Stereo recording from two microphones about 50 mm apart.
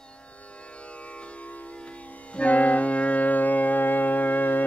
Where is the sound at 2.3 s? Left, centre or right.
Left.